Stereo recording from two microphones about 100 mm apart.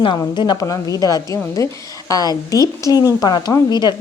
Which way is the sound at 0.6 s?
35° left (ahead or behind).